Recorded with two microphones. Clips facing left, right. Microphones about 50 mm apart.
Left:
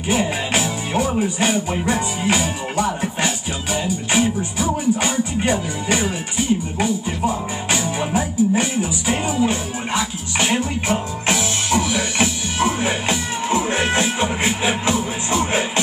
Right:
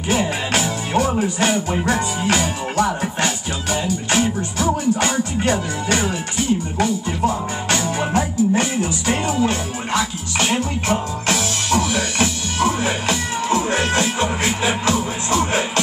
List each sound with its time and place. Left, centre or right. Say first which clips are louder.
0.1 s music: even; centre
1.4 s speech: right 1 dB; centre